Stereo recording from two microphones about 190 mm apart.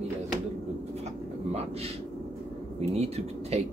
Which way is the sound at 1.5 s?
35° right (ahead or behind).